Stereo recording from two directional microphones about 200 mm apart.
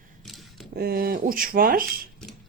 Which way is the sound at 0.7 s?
50° right (ahead or behind).